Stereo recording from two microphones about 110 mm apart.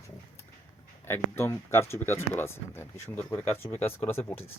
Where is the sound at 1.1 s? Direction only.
25° left (ahead or behind).